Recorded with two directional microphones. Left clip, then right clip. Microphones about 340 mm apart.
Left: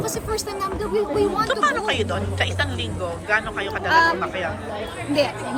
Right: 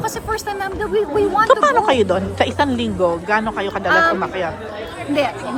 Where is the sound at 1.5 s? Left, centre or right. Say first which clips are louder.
Right 8 dB; right.